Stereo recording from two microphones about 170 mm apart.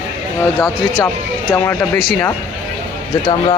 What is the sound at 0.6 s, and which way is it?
Speech, 15° left (ahead or behind).